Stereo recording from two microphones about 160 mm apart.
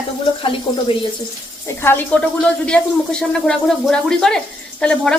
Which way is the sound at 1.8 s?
15° left (ahead or behind).